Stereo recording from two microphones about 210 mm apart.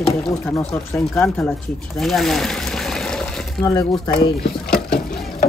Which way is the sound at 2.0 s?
Centre (ahead or behind).